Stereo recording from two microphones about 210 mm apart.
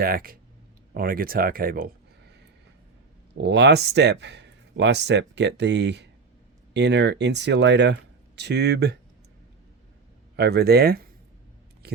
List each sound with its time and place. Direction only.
0.0 s speech: 45° right (ahead or behind)
3.3 s speech: 55° right (ahead or behind)
10.3 s speech: 50° right (ahead or behind)